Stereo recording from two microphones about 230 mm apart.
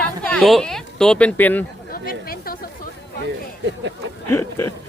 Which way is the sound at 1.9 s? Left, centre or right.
Left.